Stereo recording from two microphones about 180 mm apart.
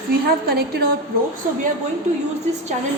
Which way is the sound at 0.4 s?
60° right (ahead or behind).